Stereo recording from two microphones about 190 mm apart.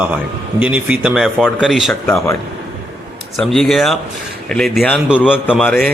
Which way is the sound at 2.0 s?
15° left (ahead or behind).